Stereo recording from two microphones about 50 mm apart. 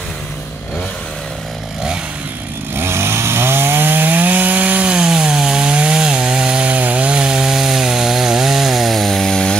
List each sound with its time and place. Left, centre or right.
2.7 s chainsaw: right
4.8 s wood: centre
6.6 s chainsaw: right; by 9.6 s centre